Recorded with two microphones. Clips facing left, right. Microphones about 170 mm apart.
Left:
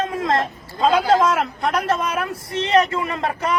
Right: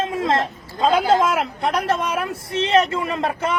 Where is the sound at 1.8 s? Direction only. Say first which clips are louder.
Even; 30° right (ahead or behind).